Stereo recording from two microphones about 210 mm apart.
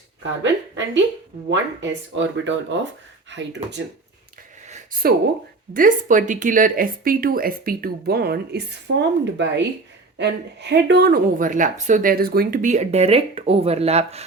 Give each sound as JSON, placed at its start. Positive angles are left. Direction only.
{"t": 1.5, "sound": "speech", "side_deg": -60}
{"t": 4.7, "sound": "a sound", "side_deg": -40}
{"t": 5.7, "sound": "a woman's voice", "side_deg": -40}